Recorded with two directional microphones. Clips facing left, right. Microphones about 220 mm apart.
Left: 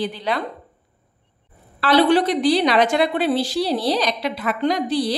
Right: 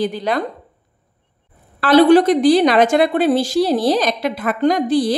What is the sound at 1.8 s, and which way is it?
A woman's voice, 45° right (ahead or behind).